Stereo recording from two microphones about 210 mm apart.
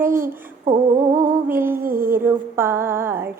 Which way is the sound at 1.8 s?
45° right (ahead or behind).